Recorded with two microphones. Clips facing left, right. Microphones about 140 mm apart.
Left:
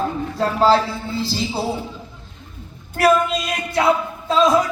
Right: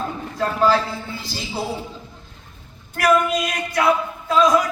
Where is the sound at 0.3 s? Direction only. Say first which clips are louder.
Left 2 dB; 30° left (ahead or behind).